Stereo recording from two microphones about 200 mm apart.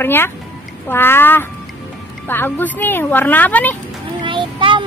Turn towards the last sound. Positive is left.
turn(degrees=-25)  # may be behind; listen again after turning